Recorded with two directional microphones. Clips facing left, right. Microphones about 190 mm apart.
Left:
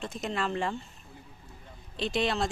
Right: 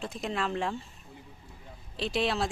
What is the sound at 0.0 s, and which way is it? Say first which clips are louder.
Speech: even; centre (ahead or behind).